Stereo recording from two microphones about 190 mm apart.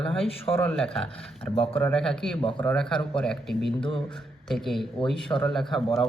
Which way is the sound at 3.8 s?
25° left (ahead or behind).